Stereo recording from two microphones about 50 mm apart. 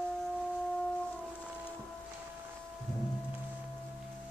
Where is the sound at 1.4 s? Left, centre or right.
Right.